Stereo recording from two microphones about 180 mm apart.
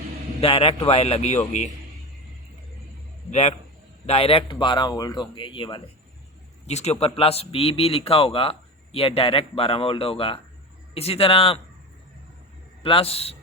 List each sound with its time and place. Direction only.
0.4 s a man's voice: 30° left (ahead or behind)
4.0 s speech: 35° left (ahead or behind)
6.7 s a man's voice: 35° left (ahead or behind)
12.8 s a man's voice: 30° left (ahead or behind)